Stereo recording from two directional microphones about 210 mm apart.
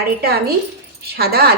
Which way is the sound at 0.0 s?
50° right (ahead or behind).